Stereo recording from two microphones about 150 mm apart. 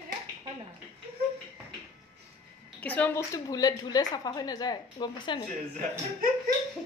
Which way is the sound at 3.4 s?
25° left (ahead or behind).